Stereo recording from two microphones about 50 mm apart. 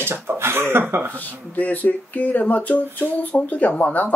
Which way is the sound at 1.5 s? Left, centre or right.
Left.